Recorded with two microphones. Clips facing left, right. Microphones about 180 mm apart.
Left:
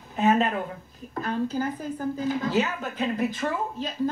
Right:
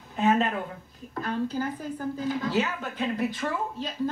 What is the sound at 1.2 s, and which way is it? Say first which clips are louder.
Speech: left 2 dB; 45° left (ahead or behind).